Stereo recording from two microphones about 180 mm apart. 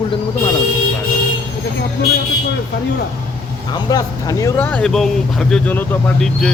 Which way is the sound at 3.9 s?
20° left (ahead or behind).